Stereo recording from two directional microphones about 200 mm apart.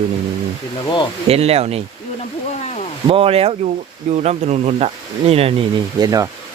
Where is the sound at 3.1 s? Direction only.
30° right (ahead or behind).